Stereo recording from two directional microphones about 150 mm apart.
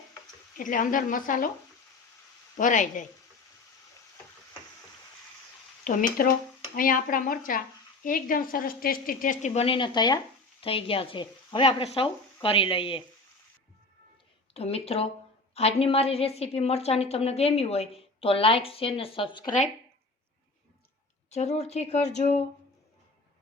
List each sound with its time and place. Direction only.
0.5 s speech: 60° left (ahead or behind)
2.6 s speech: 60° left (ahead or behind)
5.8 s speech: 60° left (ahead or behind)
9.5 s a woman's voice: 40° left (ahead or behind)
14.5 s a woman's voice: 40° left (ahead or behind)
21.2 s speech: 45° left (ahead or behind)